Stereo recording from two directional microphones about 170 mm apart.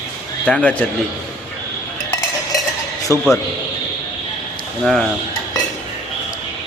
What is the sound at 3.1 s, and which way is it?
Speech, 15° right (ahead or behind).